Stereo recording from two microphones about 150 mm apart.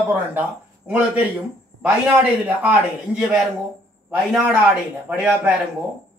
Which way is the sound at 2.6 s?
10° right (ahead or behind).